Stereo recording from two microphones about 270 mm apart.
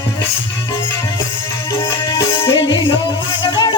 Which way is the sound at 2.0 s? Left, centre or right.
Centre.